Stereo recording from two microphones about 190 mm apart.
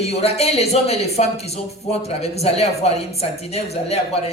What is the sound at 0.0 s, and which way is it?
Speech, 35° left (ahead or behind).